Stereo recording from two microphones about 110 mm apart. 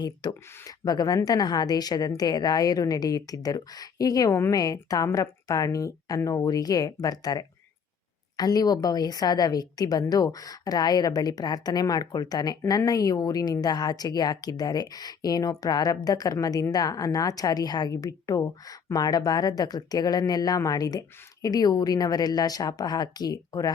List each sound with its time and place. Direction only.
0.0 s a woman's voice: 40° left (ahead or behind)